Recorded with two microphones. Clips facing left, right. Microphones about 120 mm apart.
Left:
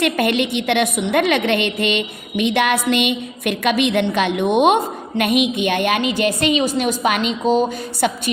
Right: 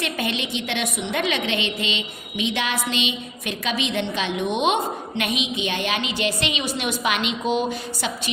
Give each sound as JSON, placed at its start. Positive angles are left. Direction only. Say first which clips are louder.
{"t": 0.0, "sound": "a woman's voice", "louder": "left 9 dB", "side_deg": 60}